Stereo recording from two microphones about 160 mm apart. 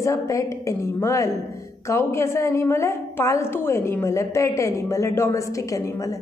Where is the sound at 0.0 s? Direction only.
20° left (ahead or behind).